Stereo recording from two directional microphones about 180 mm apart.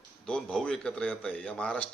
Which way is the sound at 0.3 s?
5° left (ahead or behind).